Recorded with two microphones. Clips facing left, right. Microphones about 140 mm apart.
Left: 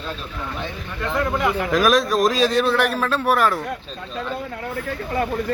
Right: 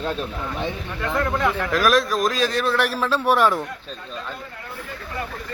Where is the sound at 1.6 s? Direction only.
20° left (ahead or behind).